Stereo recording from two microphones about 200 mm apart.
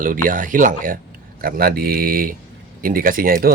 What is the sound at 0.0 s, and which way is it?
Speech, 45° right (ahead or behind).